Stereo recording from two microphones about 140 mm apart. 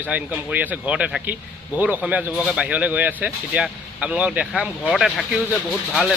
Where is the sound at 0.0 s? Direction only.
10° right (ahead or behind).